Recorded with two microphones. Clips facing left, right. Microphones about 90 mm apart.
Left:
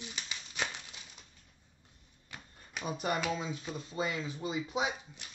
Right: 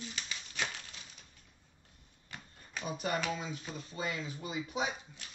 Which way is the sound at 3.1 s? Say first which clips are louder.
Left 2 dB; 25° left (ahead or behind).